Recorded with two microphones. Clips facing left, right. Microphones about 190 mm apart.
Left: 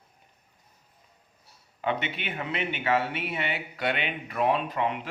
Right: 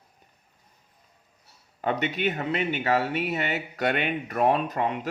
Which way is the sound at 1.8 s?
40° right (ahead or behind).